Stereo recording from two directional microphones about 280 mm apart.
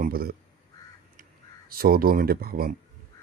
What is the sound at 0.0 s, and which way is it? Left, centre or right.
Speech, right.